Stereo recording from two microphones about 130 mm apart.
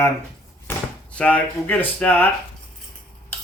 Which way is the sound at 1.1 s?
10° left (ahead or behind).